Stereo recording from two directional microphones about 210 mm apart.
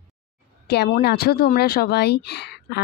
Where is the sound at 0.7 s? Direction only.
50° left (ahead or behind).